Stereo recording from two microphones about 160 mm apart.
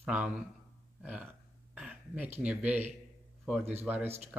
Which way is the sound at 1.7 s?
5° right (ahead or behind).